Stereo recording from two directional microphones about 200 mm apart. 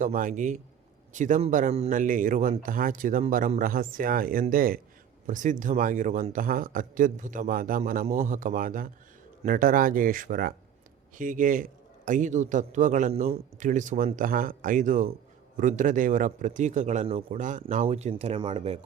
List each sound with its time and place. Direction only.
0.0 s speech: 40° right (ahead or behind)